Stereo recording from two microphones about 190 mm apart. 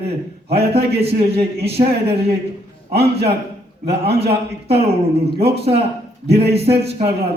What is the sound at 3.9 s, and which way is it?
Speech, 30° right (ahead or behind).